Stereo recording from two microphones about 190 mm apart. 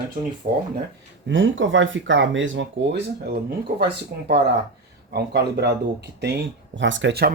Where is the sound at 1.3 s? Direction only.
80° right.